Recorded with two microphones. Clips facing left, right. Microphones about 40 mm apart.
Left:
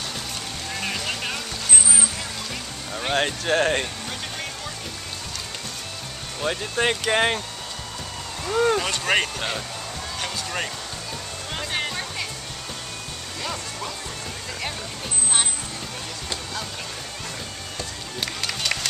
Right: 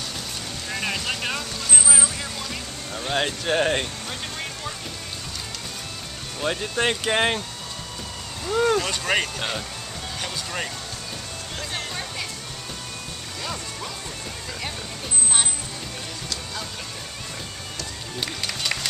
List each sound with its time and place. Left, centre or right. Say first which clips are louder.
0.7 s vehicle: right 2 dB; centre
3.2 s speech: left 1 dB; centre
6.4 s speech: even; centre
8.5 s speech: even; centre
11.5 s music: left 5 dB; left
11.9 s music: left 1 dB; centre
18.2 s music: left 1 dB; centre